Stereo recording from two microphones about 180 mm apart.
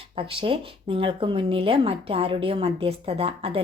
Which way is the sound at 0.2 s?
30° right (ahead or behind).